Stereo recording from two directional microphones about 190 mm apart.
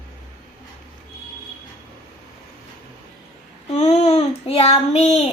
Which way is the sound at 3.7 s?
35° left (ahead or behind).